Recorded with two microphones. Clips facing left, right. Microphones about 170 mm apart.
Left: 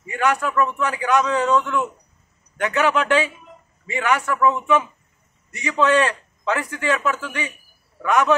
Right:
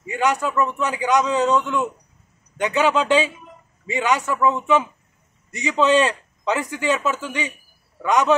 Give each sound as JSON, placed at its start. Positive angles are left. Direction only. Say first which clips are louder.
{"t": 0.0, "sound": "a man's voice", "louder": "even", "side_deg": -20}